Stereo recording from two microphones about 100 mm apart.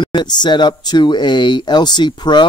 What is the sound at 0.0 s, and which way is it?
Speech, 45° left (ahead or behind).